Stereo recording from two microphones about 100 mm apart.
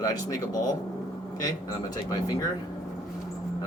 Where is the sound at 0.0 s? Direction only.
35° left (ahead or behind).